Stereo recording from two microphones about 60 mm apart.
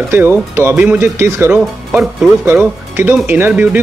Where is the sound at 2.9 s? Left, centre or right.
Right.